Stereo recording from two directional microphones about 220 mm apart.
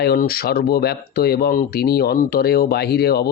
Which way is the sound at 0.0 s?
45° left (ahead or behind).